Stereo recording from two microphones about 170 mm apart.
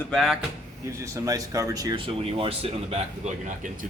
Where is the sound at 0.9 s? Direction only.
20° right (ahead or behind).